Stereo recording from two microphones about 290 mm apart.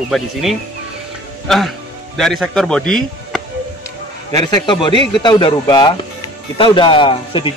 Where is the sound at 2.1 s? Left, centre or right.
Centre.